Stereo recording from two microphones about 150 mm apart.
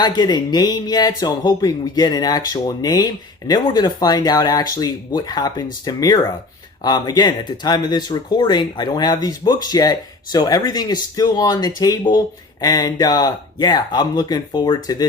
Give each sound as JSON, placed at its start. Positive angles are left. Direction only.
{"t": 0.0, "sound": "speech", "side_deg": 30}